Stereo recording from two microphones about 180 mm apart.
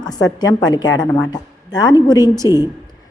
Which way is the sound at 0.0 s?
20° left (ahead or behind).